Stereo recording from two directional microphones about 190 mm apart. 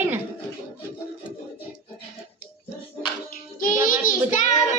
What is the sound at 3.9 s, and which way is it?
Speech, 45° left (ahead or behind).